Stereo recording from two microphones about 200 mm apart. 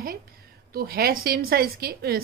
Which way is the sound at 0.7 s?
50° right (ahead or behind).